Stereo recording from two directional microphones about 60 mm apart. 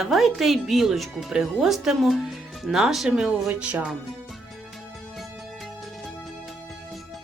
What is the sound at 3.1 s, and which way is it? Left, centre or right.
Speech, centre.